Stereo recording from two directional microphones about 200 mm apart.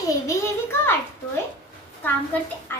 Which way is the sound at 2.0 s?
10° left (ahead or behind).